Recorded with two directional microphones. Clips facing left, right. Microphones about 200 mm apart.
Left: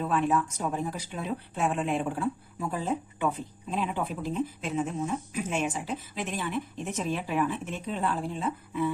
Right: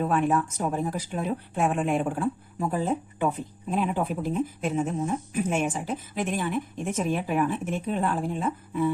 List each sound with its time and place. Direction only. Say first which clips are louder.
0.0 s speech: right 3 dB; 50° right (ahead or behind)